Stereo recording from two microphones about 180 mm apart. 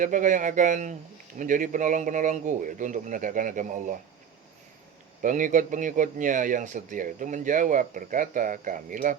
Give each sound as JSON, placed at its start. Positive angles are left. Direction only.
{"t": 0.0, "sound": "a man's voice", "side_deg": -45}
{"t": 5.2, "sound": "a man's voice", "side_deg": -45}